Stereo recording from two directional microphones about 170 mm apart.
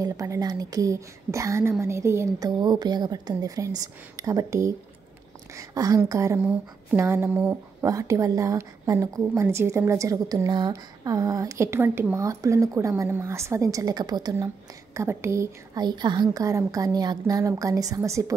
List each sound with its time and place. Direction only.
0.0 s a woman's voice: 20° right (ahead or behind)
6.4 s a sound: 10° right (ahead or behind)
7.8 s a woman's voice: 20° right (ahead or behind)